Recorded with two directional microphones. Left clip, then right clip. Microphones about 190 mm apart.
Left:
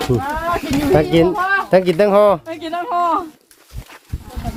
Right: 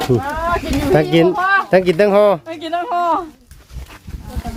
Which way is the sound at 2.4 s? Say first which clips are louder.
Right 2 dB; 35° right (ahead or behind).